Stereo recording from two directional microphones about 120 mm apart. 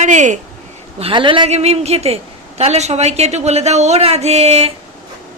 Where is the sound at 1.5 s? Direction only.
60° right (ahead or behind).